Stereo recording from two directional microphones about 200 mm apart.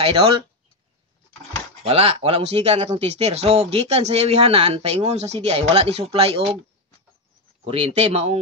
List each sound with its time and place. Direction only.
0.0 s speech: 30° right (ahead or behind)
1.9 s speech: 30° right (ahead or behind)
7.6 s speech: 30° right (ahead or behind)